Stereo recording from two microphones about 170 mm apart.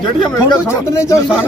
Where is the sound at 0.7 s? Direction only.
15° left (ahead or behind).